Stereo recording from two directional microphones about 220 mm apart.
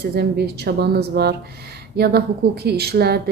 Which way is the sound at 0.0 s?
45° right (ahead or behind).